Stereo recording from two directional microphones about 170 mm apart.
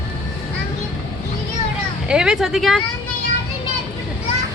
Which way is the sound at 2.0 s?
5° right (ahead or behind).